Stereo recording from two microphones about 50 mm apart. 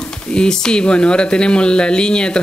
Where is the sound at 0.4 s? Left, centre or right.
Centre.